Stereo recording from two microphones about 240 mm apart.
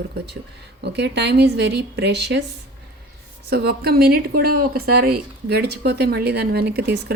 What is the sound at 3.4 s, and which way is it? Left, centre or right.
A woman's voice, right.